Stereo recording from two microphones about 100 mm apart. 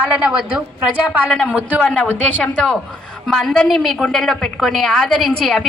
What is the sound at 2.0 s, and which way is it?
Speech, 15° left (ahead or behind).